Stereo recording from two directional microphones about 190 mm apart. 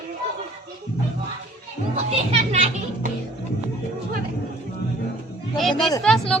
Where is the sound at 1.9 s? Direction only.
35° right (ahead or behind).